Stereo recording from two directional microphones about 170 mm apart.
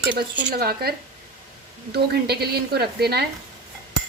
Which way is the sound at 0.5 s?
60° right (ahead or behind).